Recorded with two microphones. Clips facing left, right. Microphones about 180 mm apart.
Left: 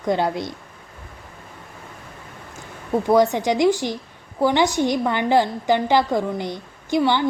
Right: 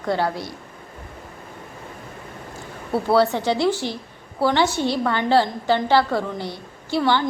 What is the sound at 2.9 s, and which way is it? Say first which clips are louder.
A woman's voice: left 2 dB; 15° left (ahead or behind).